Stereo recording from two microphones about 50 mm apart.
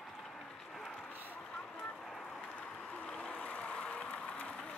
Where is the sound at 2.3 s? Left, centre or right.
Left.